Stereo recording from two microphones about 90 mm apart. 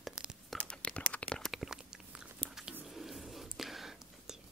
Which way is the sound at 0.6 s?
10° left (ahead or behind).